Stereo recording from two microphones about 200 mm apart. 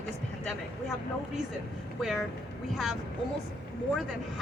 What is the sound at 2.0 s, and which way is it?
Speech, centre (ahead or behind).